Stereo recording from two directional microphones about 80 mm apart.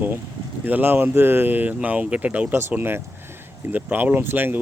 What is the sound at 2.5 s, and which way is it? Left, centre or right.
Speech, right.